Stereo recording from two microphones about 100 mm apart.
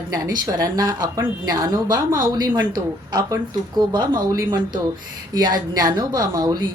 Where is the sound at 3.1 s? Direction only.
35° right (ahead or behind).